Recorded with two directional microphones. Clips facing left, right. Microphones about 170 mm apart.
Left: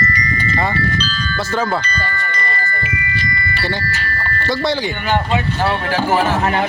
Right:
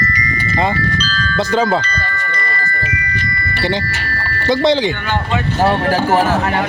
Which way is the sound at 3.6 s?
20° right (ahead or behind).